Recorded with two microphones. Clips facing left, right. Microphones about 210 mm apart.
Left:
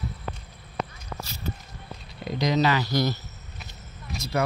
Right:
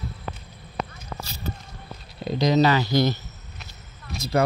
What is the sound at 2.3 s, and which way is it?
Speech, 30° right (ahead or behind).